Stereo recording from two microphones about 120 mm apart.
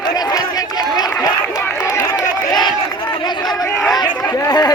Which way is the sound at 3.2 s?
35° left (ahead or behind).